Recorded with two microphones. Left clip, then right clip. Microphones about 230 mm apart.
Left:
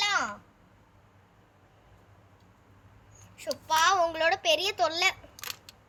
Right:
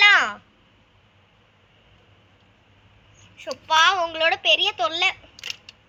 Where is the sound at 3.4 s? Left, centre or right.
Centre.